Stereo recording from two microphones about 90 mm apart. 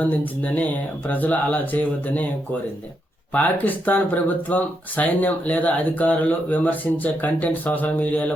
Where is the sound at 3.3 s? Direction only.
15° left (ahead or behind).